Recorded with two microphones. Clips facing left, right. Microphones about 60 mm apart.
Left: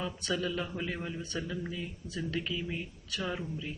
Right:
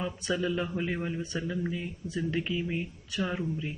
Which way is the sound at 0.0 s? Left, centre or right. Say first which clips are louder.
Right 3 dB; centre.